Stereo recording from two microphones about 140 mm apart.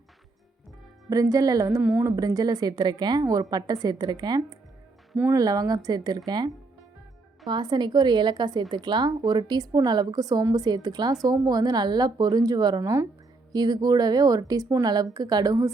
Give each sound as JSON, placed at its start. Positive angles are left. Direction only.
{"t": 1.1, "sound": "speech", "side_deg": -25}
{"t": 1.8, "sound": "a woman's voice", "side_deg": -10}
{"t": 2.0, "sound": "a woman's voice", "side_deg": -25}